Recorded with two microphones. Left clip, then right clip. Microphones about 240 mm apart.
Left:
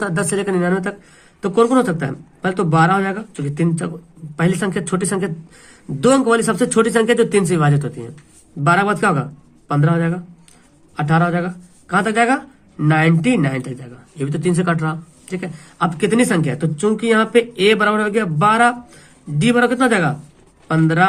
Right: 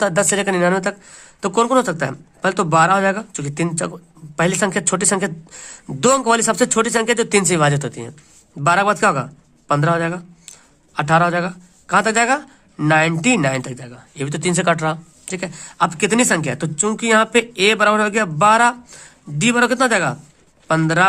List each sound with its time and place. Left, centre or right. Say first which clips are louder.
0.0 s speech: right 4 dB; right